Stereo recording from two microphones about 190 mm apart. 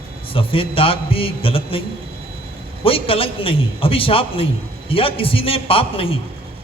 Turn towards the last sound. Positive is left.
turn(degrees=30)  # may be behind; listen again after turning